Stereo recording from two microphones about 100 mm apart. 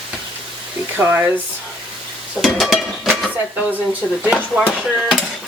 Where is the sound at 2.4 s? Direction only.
Centre (ahead or behind).